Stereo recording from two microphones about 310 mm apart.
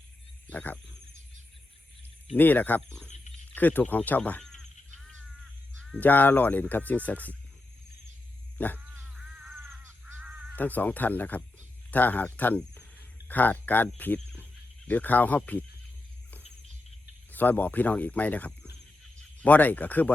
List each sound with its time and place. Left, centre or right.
0.5 s speech: centre
2.3 s speech: centre
3.1 s a sound: left
3.5 s a sound: centre
5.8 s speech: centre
8.5 s crow: centre
10.2 s caw: centre
10.6 s speech: centre
17.3 s speech: centre